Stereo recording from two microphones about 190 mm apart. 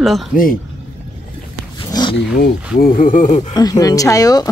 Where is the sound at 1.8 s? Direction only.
25° left (ahead or behind).